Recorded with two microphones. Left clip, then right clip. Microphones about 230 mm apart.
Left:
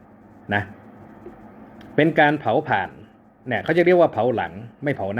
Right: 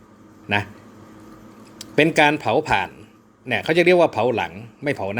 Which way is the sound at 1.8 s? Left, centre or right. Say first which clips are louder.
Right 1 dB; right.